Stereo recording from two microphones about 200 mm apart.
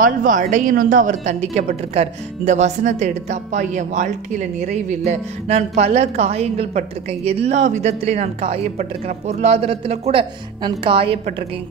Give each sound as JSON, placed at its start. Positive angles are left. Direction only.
{"t": 0.0, "sound": "speech", "side_deg": -45}